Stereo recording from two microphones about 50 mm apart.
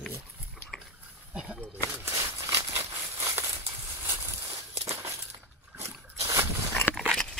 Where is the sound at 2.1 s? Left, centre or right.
Right.